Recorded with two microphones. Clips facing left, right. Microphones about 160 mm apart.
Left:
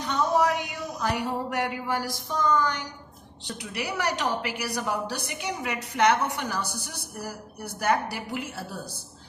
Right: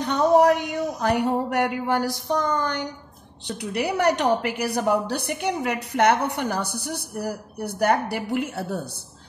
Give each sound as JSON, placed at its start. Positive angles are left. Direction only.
{"t": 0.0, "sound": "a woman's voice", "side_deg": -60}